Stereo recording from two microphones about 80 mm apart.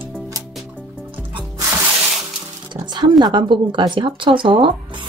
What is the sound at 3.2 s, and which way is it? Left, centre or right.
Speech, right.